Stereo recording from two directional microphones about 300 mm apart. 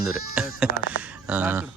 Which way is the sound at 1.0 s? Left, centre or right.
Centre.